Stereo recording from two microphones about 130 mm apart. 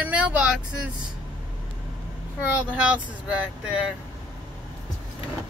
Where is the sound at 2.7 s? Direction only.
10° right (ahead or behind).